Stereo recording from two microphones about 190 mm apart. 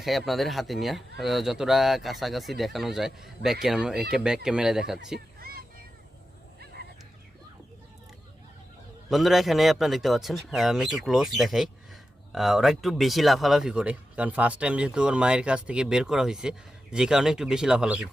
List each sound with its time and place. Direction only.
0.0 s speech: centre (ahead or behind)
5.4 s vehicle: 50° right (ahead or behind)
9.0 s speech: centre (ahead or behind)